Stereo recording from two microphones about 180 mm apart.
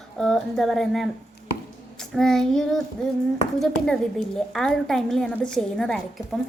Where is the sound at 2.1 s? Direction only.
5° left (ahead or behind).